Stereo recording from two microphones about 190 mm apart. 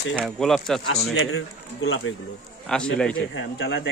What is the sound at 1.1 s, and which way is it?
Speech, 90° left.